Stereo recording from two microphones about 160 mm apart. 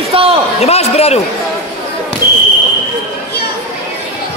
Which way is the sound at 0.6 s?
40° left (ahead or behind).